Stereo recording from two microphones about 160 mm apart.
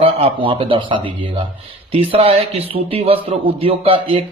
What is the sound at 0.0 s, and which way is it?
A man's voice, 35° right (ahead or behind).